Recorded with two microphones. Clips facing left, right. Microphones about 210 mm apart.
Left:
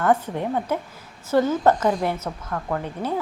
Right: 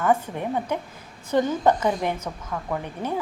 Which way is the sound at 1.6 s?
10° right (ahead or behind).